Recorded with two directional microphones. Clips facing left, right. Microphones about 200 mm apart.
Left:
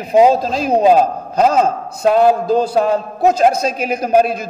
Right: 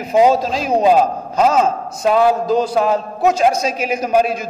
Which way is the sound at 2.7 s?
35° left (ahead or behind).